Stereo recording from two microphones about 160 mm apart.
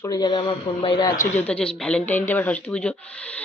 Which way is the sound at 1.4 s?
5° left (ahead or behind).